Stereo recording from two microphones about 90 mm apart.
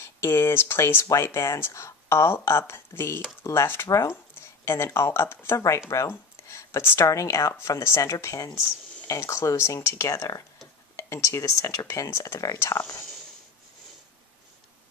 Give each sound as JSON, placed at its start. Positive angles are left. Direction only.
{"t": 0.0, "sound": "speech", "side_deg": 30}